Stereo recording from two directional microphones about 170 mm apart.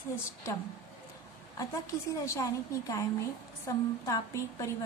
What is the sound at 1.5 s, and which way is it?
A woman's voice, 20° left (ahead or behind).